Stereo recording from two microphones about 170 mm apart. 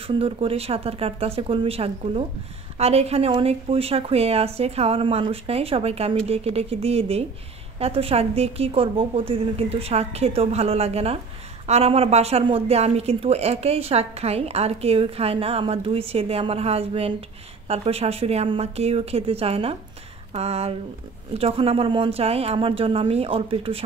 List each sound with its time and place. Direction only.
0.0 s speech: 35° right (ahead or behind)